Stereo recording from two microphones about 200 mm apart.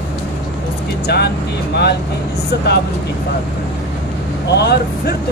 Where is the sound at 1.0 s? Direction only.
55° left (ahead or behind).